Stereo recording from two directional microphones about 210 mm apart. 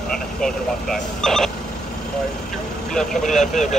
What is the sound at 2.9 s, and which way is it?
Speech, centre (ahead or behind).